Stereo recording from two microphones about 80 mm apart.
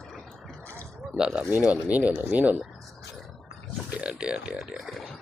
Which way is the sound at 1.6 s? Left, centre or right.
Centre.